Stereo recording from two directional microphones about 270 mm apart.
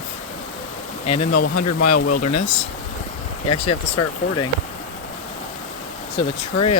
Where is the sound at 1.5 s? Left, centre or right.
Left.